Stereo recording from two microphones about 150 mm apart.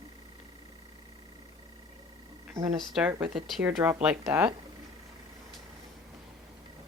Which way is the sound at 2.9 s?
5° right (ahead or behind).